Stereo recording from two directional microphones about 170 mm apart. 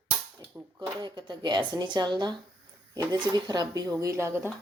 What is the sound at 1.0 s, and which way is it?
Speech, 25° right (ahead or behind).